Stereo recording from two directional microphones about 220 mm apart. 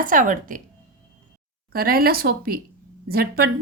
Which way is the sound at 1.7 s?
45° right (ahead or behind).